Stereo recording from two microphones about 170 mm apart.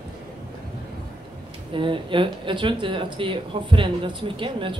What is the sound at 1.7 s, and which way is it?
Speech, 30° right (ahead or behind).